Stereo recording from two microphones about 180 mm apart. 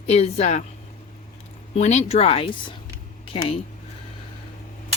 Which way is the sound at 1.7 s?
40° left (ahead or behind).